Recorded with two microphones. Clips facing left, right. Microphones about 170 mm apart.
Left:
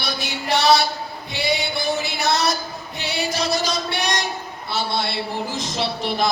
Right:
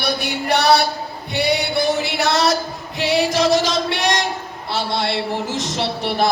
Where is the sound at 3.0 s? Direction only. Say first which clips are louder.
Right 8 dB; 90° right.